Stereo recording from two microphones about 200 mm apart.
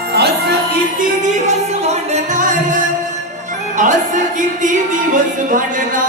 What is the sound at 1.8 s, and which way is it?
Music, 35° right (ahead or behind).